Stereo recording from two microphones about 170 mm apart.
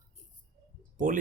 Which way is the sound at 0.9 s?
50° right (ahead or behind).